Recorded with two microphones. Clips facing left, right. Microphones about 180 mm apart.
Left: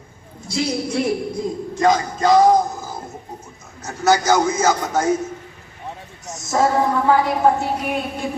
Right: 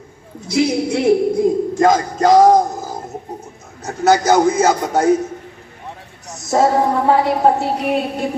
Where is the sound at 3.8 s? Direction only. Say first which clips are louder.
Right 3 dB; 30° right (ahead or behind).